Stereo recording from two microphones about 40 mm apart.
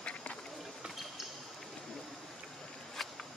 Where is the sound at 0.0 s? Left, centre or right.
Left.